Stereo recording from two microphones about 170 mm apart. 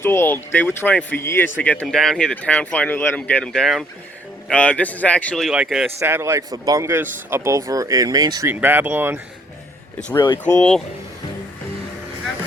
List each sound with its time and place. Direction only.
0.0 s speech: 15° left (ahead or behind); by 5.9 s 5° right (ahead or behind)
6.0 s speech: 15° right (ahead or behind)
10.2 s speech: 25° left (ahead or behind)
10.6 s speech: 5° left (ahead or behind)